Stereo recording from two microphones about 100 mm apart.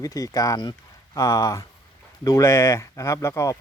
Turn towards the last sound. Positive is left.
turn(degrees=30)  # may be behind; listen again after turning